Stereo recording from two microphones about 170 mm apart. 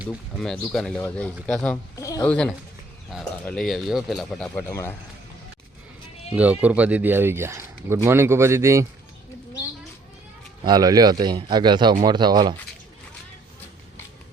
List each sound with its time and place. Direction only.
0.3 s speech: 5° left (ahead or behind)
2.2 s speech: 5° left (ahead or behind)
6.3 s speech: 10° right (ahead or behind)
10.6 s a man's voice: 25° right (ahead or behind)